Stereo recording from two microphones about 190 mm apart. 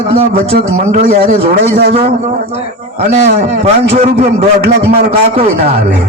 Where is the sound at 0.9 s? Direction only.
35° right (ahead or behind).